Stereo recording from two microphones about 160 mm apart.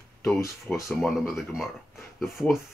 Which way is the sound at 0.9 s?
Centre (ahead or behind).